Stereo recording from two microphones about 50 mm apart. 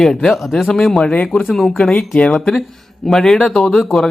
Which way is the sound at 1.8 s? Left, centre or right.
Centre.